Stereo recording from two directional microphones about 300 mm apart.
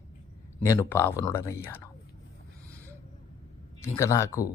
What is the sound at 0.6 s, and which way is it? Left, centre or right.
Speech, centre.